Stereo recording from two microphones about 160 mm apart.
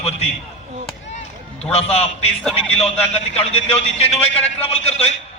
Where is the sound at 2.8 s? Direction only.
40° left (ahead or behind).